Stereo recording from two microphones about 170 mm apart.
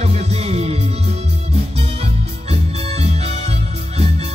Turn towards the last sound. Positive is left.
turn(degrees=-40)  # may be behind; listen again after turning